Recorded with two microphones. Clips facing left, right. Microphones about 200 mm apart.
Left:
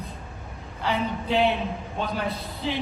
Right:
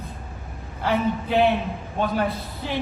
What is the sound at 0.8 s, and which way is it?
Speech, 55° right (ahead or behind).